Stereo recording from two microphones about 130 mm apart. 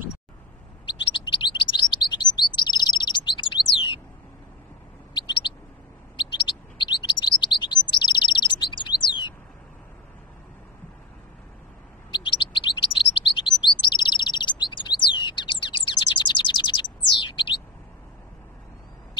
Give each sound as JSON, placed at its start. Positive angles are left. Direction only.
{"t": 0.8, "sound": "chirp", "side_deg": 35}
{"t": 6.1, "sound": "chirp", "side_deg": 35}
{"t": 12.1, "sound": "chirp", "side_deg": 40}